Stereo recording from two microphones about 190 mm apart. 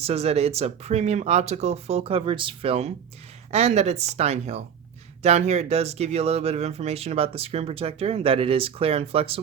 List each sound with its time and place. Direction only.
0.0 s speech: 35° right (ahead or behind)